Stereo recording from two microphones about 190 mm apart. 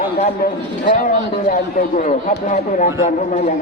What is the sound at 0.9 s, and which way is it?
A man's voice, 45° left (ahead or behind).